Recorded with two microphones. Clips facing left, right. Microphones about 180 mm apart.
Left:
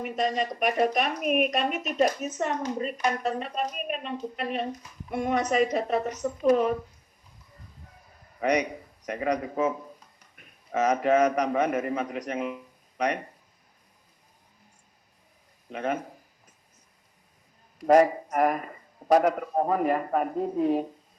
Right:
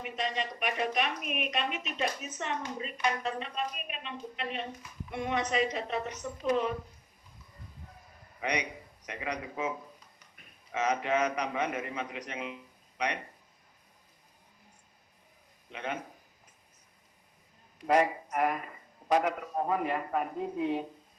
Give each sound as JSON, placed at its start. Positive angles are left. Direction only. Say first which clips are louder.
{"t": 0.0, "sound": "a woman's voice", "louder": "left 7 dB", "side_deg": 45}
{"t": 8.4, "sound": "a man's voice", "louder": "left 9 dB", "side_deg": 45}
{"t": 15.7, "sound": "a woman's voice", "louder": "left 8 dB", "side_deg": 45}
{"t": 17.7, "sound": "a woman's voice", "louder": "left 7 dB", "side_deg": 40}